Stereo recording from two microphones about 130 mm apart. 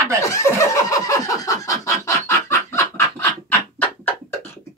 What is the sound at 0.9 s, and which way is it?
Chicken, 25° left (ahead or behind).